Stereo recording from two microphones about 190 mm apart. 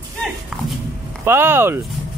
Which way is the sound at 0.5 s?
5° right (ahead or behind).